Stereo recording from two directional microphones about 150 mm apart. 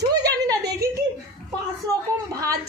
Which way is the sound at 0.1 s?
25° right (ahead or behind).